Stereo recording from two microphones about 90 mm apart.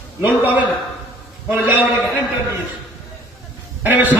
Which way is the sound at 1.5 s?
20° right (ahead or behind).